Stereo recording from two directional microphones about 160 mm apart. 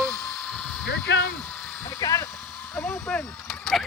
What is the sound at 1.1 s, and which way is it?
Speech, 90° left.